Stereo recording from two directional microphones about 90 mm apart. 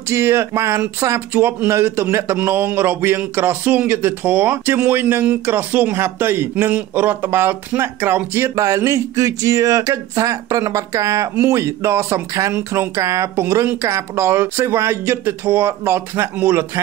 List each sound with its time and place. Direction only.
0.1 s speech: 30° right (ahead or behind)
8.5 s speech: 40° right (ahead or behind); by 16.8 s 25° right (ahead or behind)